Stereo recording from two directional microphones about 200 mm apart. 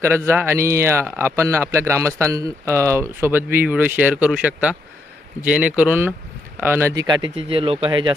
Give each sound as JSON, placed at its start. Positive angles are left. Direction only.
{"t": 0.0, "sound": "a man's voice", "side_deg": -10}